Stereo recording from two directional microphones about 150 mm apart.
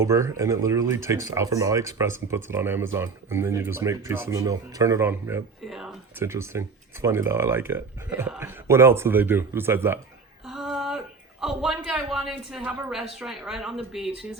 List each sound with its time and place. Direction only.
0.0 s speech: 20° right (ahead or behind)
5.6 s a sound: centre (ahead or behind)
6.1 s speech: 15° right (ahead or behind)
10.4 s speech: centre (ahead or behind)